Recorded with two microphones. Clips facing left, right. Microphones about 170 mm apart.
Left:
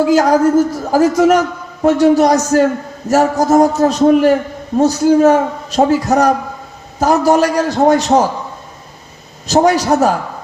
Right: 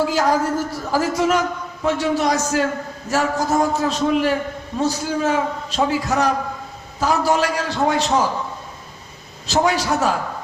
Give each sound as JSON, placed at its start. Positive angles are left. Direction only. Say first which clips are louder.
{"t": 0.1, "sound": "a man's voice", "louder": "left 9 dB", "side_deg": 40}
{"t": 9.5, "sound": "a man's voice", "louder": "left 7 dB", "side_deg": 40}